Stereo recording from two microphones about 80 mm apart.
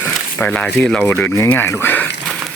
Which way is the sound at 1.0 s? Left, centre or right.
Centre.